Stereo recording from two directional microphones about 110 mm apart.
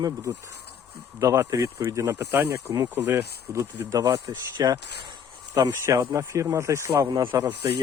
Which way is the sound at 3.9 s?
30° right (ahead or behind).